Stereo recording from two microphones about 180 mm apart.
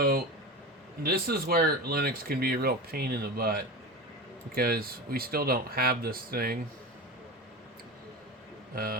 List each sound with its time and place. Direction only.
0.0 s speech: 55° right (ahead or behind)
8.7 s a man's voice: 55° right (ahead or behind)